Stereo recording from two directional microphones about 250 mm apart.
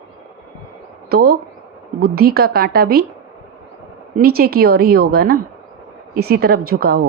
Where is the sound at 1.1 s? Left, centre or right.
Right.